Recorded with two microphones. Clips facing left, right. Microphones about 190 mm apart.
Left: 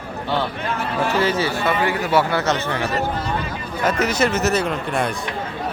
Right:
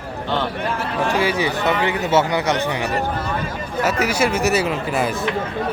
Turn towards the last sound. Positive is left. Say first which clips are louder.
# right 1 dB
turn(degrees=-5)  # may be behind; listen again after turning